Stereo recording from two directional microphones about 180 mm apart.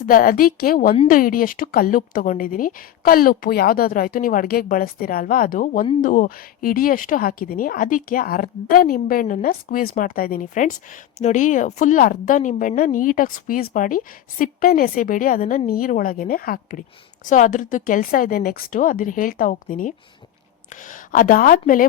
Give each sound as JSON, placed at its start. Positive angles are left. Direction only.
{"t": 0.0, "sound": "a woman's voice", "side_deg": 50}